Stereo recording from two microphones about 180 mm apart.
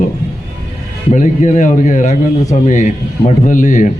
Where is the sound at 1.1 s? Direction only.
40° left (ahead or behind).